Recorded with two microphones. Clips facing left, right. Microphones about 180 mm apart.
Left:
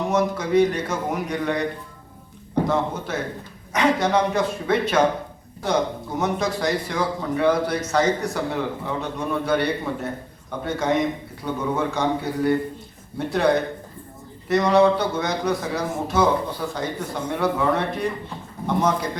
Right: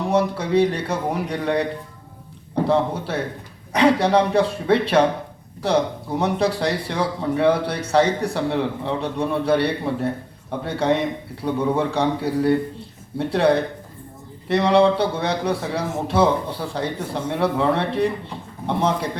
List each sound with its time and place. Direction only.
0.1 s a man's voice: 30° right (ahead or behind)
2.6 s a man's voice: 30° right (ahead or behind)